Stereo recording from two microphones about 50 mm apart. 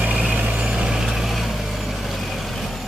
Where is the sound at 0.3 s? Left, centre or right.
Right.